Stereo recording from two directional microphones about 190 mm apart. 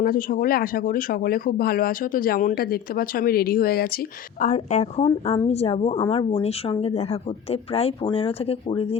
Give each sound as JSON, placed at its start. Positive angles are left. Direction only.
{"t": 0.0, "sound": "speech", "side_deg": 50}